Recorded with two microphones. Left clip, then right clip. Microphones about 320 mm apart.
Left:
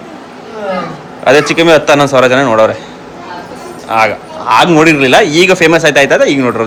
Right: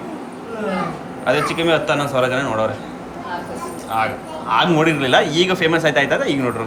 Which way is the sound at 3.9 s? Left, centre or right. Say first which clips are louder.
Left 11 dB; centre.